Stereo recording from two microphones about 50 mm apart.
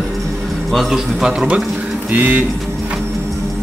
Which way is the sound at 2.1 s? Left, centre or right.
Right.